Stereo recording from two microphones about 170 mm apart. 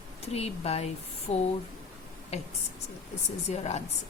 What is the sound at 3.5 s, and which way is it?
Speech, 40° left (ahead or behind).